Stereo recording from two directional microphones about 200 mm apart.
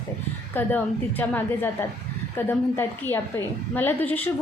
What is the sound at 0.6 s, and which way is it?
A woman's voice, 10° left (ahead or behind).